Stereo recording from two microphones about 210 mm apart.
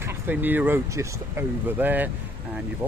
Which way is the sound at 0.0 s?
10° right (ahead or behind).